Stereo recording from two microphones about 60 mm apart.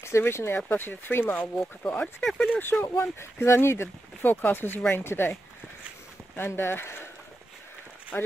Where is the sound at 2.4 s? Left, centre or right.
Left.